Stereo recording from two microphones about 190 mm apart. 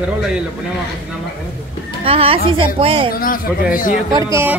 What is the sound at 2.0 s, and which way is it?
A woman's voice, 30° right (ahead or behind).